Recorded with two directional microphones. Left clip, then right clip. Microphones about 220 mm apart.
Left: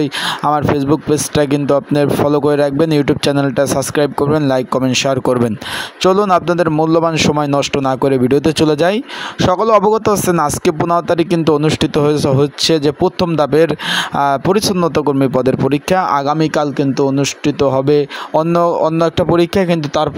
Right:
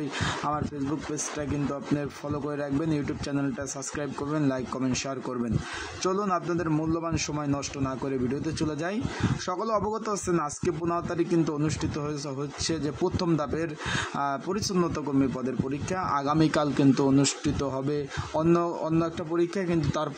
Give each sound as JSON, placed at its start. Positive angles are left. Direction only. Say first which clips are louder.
{"t": 1.1, "sound": "speech", "louder": "left 18 dB", "side_deg": 40}